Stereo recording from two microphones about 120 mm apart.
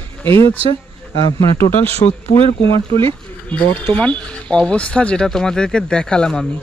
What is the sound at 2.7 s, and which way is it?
Speech, 45° right (ahead or behind).